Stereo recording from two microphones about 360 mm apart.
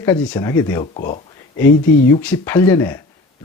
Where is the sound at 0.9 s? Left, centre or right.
Left.